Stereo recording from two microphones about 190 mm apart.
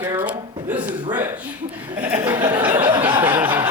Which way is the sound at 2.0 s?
10° right (ahead or behind).